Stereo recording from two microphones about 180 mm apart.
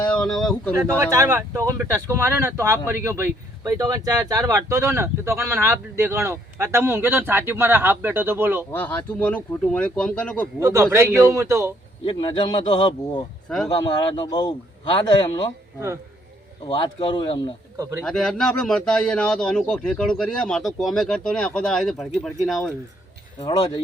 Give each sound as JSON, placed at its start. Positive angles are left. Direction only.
{"t": 0.0, "sound": "speech", "side_deg": 5}
{"t": 1.1, "sound": "speech", "side_deg": -20}
{"t": 8.7, "sound": "speech", "side_deg": 10}
{"t": 10.6, "sound": "speech", "side_deg": -15}
{"t": 12.0, "sound": "a man's voice", "side_deg": 30}
{"t": 16.6, "sound": "a man's voice", "side_deg": 25}
{"t": 18.0, "sound": "speech", "side_deg": 5}
{"t": 23.5, "sound": "a man's voice", "side_deg": 20}